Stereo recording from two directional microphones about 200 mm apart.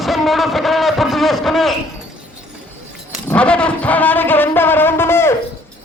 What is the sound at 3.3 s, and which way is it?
Music, 5° left (ahead or behind).